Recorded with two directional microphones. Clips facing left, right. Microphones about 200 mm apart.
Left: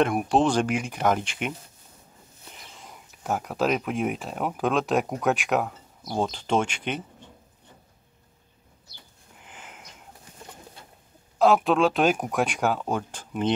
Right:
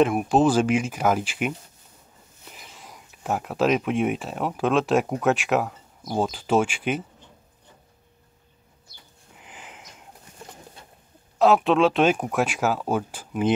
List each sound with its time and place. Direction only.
0.0 s speech: centre (ahead or behind)
2.5 s speech: 5° right (ahead or behind)
9.5 s sniff: centre (ahead or behind)
11.3 s speech: centre (ahead or behind)